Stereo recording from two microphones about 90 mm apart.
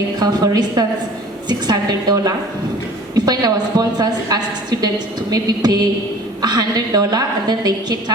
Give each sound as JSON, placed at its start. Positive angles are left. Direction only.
{"t": 0.2, "sound": "a woman's voice", "side_deg": -45}